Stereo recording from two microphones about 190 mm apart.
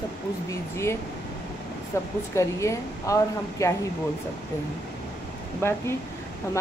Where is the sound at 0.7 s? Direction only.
15° left (ahead or behind).